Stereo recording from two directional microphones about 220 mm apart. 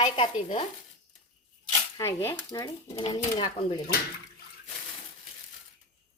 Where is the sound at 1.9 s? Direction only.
10° left (ahead or behind).